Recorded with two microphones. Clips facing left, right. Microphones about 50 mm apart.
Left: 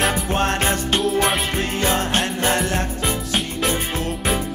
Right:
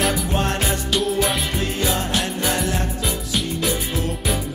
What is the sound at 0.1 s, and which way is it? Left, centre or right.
Music, left.